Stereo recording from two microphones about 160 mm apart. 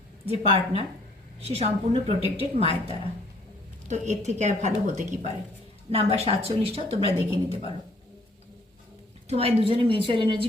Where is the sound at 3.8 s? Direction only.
45° right (ahead or behind).